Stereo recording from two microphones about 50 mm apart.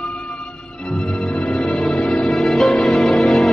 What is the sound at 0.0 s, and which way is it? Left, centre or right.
Music, centre.